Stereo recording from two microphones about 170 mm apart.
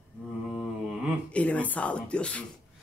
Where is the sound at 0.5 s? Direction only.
5° right (ahead or behind).